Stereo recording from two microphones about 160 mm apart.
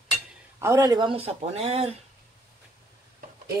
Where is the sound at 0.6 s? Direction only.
20° right (ahead or behind); by 1.9 s 40° right (ahead or behind).